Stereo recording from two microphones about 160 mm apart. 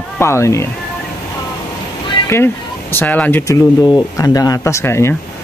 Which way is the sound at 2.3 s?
15° left (ahead or behind).